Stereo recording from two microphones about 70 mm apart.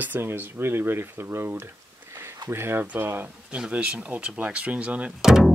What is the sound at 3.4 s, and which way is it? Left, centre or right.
Speech, centre.